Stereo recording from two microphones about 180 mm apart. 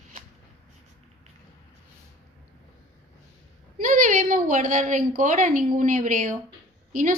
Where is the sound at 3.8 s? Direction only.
45° right (ahead or behind).